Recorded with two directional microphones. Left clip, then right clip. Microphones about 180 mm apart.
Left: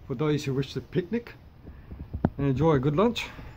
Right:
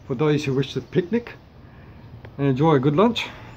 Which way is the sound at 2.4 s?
30° left (ahead or behind).